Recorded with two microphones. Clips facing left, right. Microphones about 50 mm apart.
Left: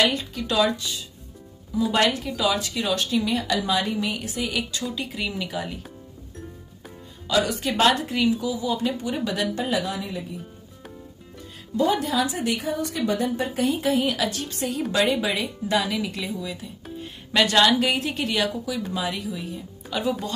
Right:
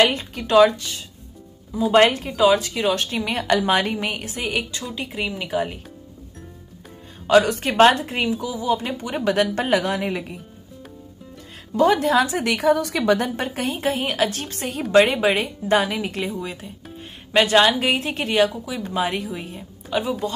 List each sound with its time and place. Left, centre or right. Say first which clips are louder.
0.0 s a woman's voice: right 4 dB; right
7.2 s a woman's voice: right 7 dB; right
11.7 s a woman's voice: right 5 dB; right
13.6 s a woman's voice: left 2 dB; right
17.3 s a woman's voice: right 3 dB; right
18.9 s speech: right 4 dB; right
19.9 s a woman's voice: right 2 dB; right